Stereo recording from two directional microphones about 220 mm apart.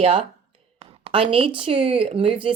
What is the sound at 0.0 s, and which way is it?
A woman's voice, 30° right (ahead or behind).